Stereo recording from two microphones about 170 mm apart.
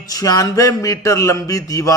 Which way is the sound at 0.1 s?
20° left (ahead or behind).